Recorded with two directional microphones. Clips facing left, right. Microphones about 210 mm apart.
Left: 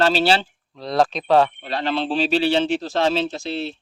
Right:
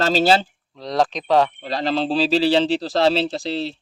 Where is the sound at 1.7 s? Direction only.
35° right (ahead or behind).